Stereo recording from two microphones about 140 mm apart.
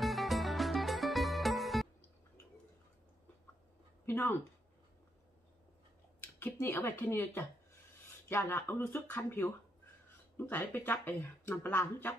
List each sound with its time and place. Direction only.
0.0 s music: centre (ahead or behind)
4.0 s a woman's voice: 15° left (ahead or behind)
6.2 s speech: 15° left (ahead or behind)